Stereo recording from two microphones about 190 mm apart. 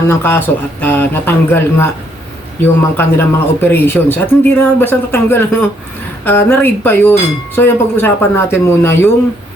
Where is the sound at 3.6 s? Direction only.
10° left (ahead or behind).